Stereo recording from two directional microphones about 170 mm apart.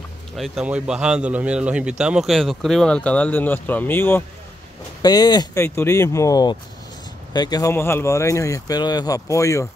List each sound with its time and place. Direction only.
0.4 s speech: 5° right (ahead or behind); by 4.2 s 15° left (ahead or behind)
5.0 s speech: 25° left (ahead or behind)